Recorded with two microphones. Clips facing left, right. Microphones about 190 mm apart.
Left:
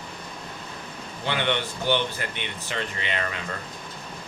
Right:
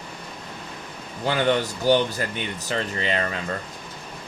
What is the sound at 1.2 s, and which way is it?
Speech, 40° right (ahead or behind).